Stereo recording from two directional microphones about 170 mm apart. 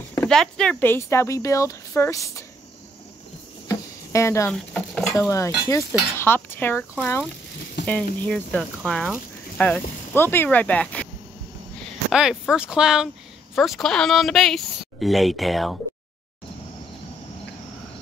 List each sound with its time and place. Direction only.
0.1 s speech: 5° left (ahead or behind)
3.6 s a sound: 15° left (ahead or behind)
4.5 s speech: 5° left (ahead or behind)
7.8 s speech: 10° left (ahead or behind)